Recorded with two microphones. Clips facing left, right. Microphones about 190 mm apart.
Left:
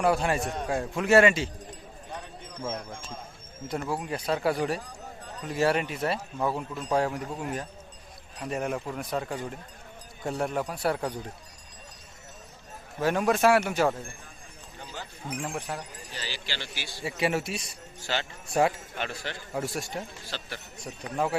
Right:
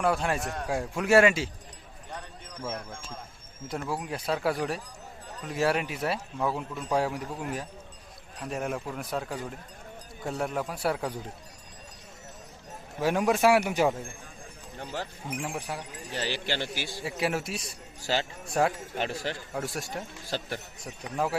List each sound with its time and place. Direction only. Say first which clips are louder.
0.0 s speech: left 2 dB; centre (ahead or behind)
2.7 s speech: left 1 dB; 15° left (ahead or behind)
3.7 s speech: left 2 dB; centre (ahead or behind)
13.0 s a man's voice: even; 10° right (ahead or behind)
15.3 s speech: left 2 dB; 5° right (ahead or behind)
16.1 s a man's voice: right 7 dB; 55° right (ahead or behind)
17.0 s speech: left 2 dB; centre (ahead or behind)
18.0 s speech: right 3 dB; 35° right (ahead or behind)
18.5 s speech: left 2 dB; centre (ahead or behind)
18.9 s speech: right 3 dB; 35° right (ahead or behind)
19.5 s speech: left 2 dB; centre (ahead or behind)
20.3 s a man's voice: right 7 dB; 45° right (ahead or behind)
20.8 s speech: left 2 dB; centre (ahead or behind)